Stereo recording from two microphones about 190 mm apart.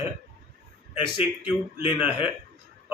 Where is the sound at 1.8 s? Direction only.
10° right (ahead or behind).